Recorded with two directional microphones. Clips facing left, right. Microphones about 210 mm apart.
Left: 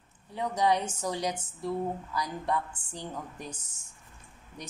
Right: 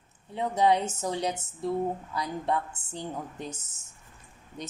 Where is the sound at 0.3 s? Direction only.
25° right (ahead or behind).